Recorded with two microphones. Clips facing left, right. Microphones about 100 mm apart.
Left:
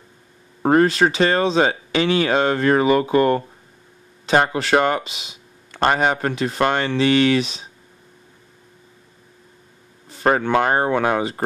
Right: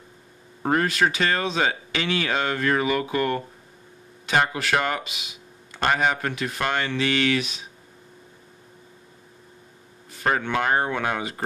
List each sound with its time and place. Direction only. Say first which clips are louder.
0.6 s speech: left 7 dB; 35° left (ahead or behind)
10.0 s speech: left 6 dB; 30° left (ahead or behind)